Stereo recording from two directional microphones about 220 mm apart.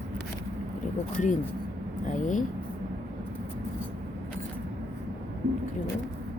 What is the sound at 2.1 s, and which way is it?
Speech, 35° left (ahead or behind).